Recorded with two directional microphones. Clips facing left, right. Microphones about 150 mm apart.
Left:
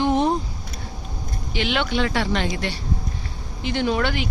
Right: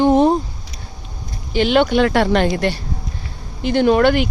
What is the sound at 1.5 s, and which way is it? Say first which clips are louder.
Speech: right 9 dB; 40° right (ahead or behind).